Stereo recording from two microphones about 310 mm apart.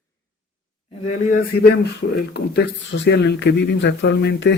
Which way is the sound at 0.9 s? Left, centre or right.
Left.